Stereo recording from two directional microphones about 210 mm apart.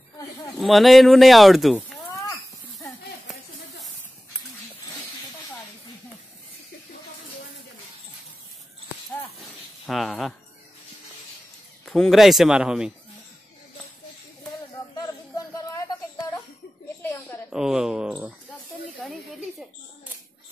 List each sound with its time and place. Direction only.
0.2 s a sound: 15° left (ahead or behind)
0.6 s speech: centre (ahead or behind)
9.8 s a man's voice: centre (ahead or behind)
11.8 s a man's voice: centre (ahead or behind)
14.7 s a sound: 15° left (ahead or behind)
17.5 s speech: centre (ahead or behind)